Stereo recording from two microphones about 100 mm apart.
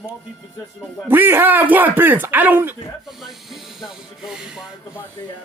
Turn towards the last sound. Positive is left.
turn(degrees=-5)  # may be behind; listen again after turning